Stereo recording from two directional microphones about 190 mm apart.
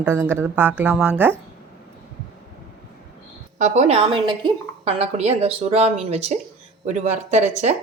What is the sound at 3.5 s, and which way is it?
A woman's voice, 35° right (ahead or behind).